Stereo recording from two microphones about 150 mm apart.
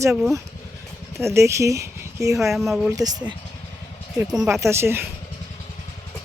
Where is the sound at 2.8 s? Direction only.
25° right (ahead or behind).